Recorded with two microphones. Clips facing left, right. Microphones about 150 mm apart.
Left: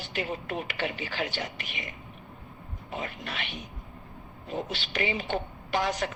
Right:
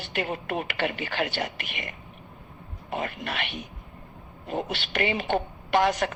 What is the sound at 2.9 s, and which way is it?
Speech, 60° right (ahead or behind).